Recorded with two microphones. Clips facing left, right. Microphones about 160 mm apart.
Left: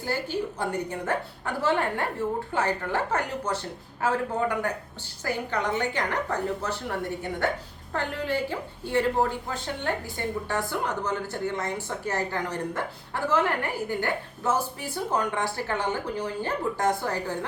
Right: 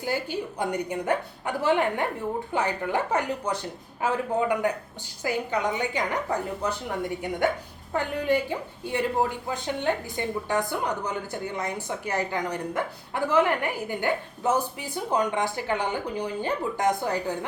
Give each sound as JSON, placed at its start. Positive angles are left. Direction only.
{"t": 0.0, "sound": "a woman's voice", "side_deg": -15}